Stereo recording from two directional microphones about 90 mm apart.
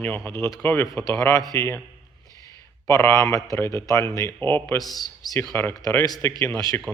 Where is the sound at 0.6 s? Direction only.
25° left (ahead or behind).